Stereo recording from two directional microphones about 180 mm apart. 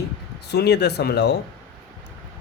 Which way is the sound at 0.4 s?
65° left (ahead or behind).